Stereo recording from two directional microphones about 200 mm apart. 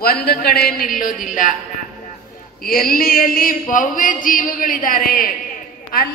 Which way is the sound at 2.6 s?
45° left (ahead or behind).